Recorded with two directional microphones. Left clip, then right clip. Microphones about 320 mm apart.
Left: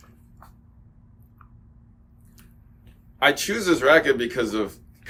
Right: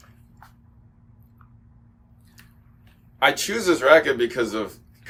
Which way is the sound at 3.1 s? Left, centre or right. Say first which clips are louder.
Even; centre.